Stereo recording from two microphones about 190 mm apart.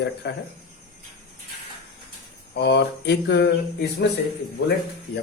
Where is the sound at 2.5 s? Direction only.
60° left (ahead or behind).